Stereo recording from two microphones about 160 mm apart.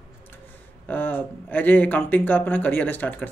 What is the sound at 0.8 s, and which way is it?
Speech, 10° left (ahead or behind).